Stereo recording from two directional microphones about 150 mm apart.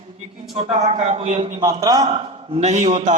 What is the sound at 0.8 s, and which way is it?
Speech, 45° right (ahead or behind).